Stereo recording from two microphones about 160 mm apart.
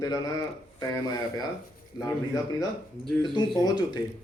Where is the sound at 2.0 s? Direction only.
25° left (ahead or behind).